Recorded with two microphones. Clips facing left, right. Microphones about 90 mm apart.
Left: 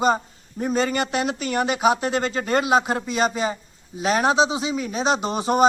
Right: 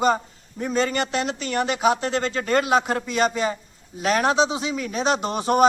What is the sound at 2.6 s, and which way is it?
Speech, 10° left (ahead or behind).